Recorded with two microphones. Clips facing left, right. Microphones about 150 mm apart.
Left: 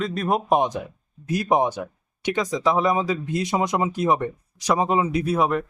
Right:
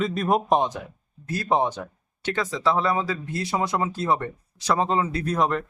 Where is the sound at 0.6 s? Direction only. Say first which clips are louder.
Left 2 dB; 15° left (ahead or behind).